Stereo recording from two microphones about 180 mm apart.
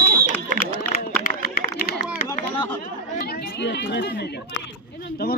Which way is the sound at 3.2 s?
60° left (ahead or behind).